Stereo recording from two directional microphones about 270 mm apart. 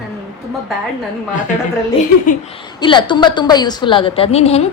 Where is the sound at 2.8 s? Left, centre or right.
Centre.